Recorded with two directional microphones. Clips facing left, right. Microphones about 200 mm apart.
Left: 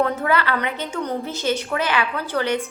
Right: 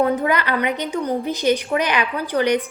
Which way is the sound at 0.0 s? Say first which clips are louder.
Right 2 dB; 15° right (ahead or behind).